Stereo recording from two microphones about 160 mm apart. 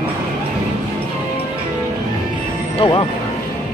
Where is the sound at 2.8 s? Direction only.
30° left (ahead or behind).